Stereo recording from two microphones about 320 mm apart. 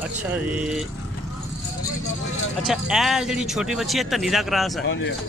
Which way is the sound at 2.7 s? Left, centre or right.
Centre.